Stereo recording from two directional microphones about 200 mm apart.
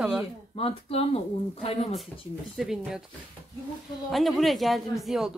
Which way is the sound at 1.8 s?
Centre (ahead or behind).